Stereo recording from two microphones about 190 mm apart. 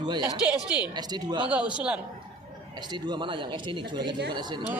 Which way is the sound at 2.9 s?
25° right (ahead or behind).